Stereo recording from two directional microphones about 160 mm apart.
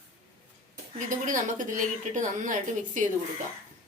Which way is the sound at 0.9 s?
55° right (ahead or behind).